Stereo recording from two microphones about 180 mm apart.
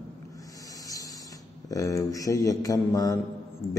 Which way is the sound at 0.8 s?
20° left (ahead or behind).